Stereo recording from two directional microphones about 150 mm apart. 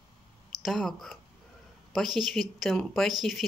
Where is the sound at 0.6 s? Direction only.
Centre (ahead or behind).